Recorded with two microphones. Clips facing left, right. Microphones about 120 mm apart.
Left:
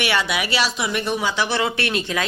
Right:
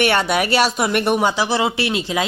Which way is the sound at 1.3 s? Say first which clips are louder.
Right 3 dB; 30° right (ahead or behind).